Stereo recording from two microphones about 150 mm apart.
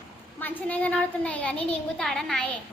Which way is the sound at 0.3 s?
10° left (ahead or behind).